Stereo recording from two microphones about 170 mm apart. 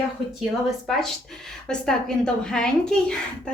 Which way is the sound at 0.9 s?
Centre (ahead or behind).